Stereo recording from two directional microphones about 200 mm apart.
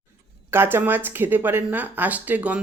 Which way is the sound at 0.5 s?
10° right (ahead or behind).